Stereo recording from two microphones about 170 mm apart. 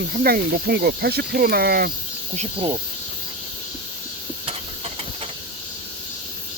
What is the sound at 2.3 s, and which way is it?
Speech, 40° right (ahead or behind).